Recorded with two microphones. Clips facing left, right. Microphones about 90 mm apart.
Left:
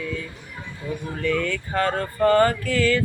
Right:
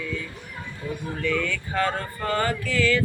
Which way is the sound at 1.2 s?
35° left (ahead or behind).